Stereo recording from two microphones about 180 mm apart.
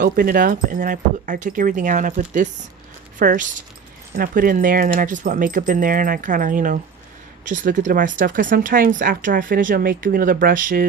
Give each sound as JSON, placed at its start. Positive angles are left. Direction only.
{"t": 0.0, "sound": "speech", "side_deg": -55}